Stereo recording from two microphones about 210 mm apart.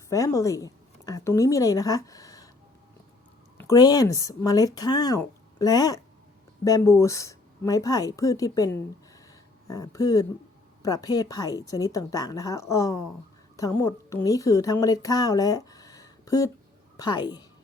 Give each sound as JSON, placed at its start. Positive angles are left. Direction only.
{"t": 0.1, "sound": "a woman's voice", "side_deg": 15}
{"t": 3.6, "sound": "a woman's voice", "side_deg": 15}